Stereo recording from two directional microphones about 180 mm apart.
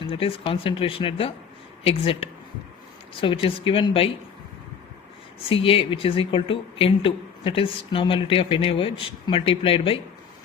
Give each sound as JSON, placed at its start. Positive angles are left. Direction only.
{"t": 0.0, "sound": "speech", "side_deg": 30}
{"t": 3.2, "sound": "speech", "side_deg": 30}
{"t": 5.5, "sound": "speech", "side_deg": 30}